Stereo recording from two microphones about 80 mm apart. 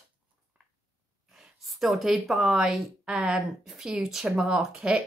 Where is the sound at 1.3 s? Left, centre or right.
Centre.